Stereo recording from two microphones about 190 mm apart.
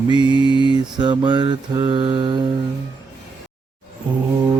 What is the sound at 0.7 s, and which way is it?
Mantra, 25° right (ahead or behind).